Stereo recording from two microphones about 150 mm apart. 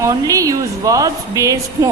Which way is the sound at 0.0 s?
20° right (ahead or behind).